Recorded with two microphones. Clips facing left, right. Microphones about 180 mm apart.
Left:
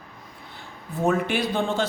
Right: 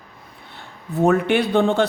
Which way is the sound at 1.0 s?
65° right (ahead or behind).